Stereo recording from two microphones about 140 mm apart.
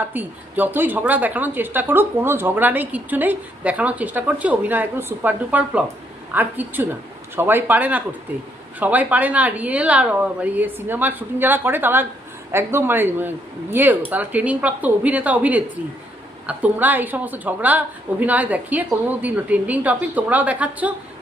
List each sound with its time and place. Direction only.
0.0 s speech: 15° right (ahead or behind)